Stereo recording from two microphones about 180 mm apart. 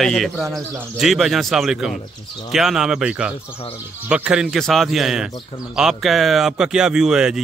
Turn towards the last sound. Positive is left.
turn(degrees=-5)  # may be behind; listen again after turning